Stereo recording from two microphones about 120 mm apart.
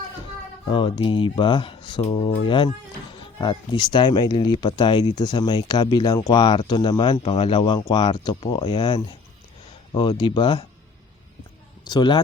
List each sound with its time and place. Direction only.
0.7 s speech: 45° left (ahead or behind)
7.2 s speech: 55° left (ahead or behind)
7.8 s speech: 35° left (ahead or behind)
11.9 s speech: 35° left (ahead or behind)